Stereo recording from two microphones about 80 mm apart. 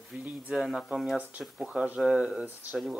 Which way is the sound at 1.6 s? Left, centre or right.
Centre.